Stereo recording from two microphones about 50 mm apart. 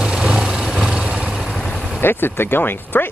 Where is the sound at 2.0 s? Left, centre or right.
Left.